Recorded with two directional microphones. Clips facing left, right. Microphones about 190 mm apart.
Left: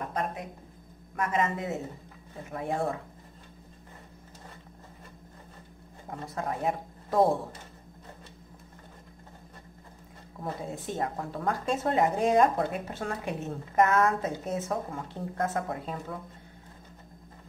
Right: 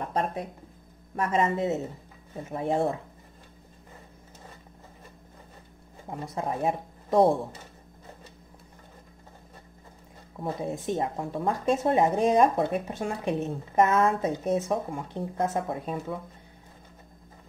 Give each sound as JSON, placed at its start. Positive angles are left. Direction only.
{"t": 0.1, "sound": "speech", "side_deg": -30}
{"t": 6.3, "sound": "speech", "side_deg": -20}
{"t": 10.4, "sound": "speech", "side_deg": -20}